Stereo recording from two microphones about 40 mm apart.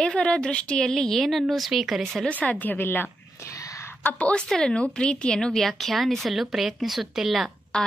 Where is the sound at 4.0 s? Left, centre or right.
Left.